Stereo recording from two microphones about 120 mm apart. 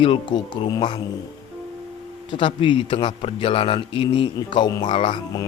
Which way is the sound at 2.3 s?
45° left (ahead or behind).